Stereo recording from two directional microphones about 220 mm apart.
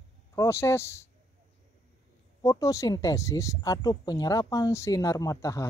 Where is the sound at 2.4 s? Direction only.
15° left (ahead or behind).